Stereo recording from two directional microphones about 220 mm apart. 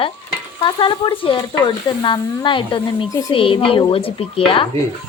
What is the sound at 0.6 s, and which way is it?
A woman's voice, 20° left (ahead or behind).